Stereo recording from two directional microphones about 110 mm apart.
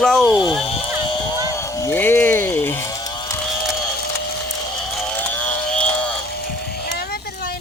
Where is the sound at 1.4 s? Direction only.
30° left (ahead or behind).